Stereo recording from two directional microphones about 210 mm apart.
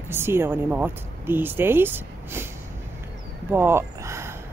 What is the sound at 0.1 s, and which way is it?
Speech, 10° right (ahead or behind).